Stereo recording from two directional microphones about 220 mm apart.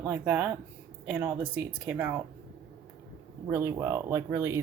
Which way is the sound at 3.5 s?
15° right (ahead or behind).